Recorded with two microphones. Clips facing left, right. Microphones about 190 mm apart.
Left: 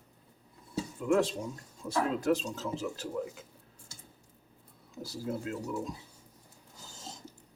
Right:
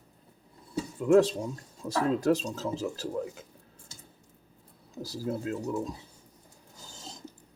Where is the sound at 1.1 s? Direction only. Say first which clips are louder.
Right 6 dB; 35° right (ahead or behind).